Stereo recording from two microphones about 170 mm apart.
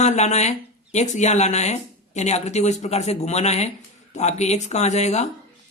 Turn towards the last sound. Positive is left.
turn(degrees=40)  # may be behind; listen again after turning